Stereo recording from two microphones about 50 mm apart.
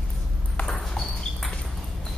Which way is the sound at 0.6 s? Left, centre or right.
Centre.